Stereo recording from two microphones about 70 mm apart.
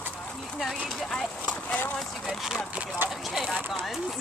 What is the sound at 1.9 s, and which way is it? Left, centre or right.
Speech, centre.